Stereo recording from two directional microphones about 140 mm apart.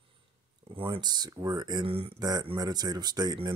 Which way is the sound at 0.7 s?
40° right (ahead or behind).